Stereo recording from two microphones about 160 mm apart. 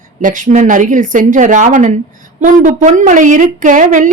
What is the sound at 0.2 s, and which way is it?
A woman's voice, 55° right (ahead or behind).